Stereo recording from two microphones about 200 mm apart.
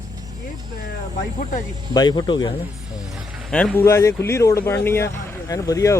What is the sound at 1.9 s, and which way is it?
Speech, 20° left (ahead or behind).